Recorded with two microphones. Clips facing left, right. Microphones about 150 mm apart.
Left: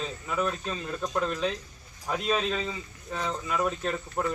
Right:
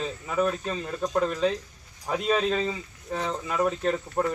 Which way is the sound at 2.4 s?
40° right (ahead or behind).